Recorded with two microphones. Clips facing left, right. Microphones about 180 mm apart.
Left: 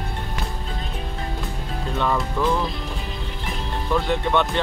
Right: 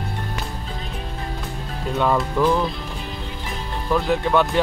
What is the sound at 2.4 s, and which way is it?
Speech, 10° right (ahead or behind).